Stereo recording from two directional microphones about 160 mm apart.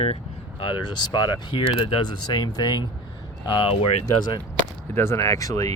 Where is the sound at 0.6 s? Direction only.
30° left (ahead or behind).